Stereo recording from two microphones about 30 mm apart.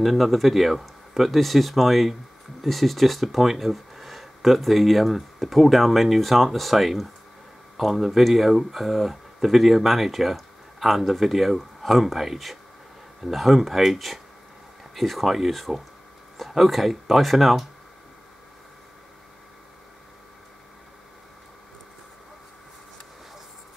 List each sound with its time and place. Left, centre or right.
0.0 s speech: centre
15.7 s speech: right
16.3 s speech: centre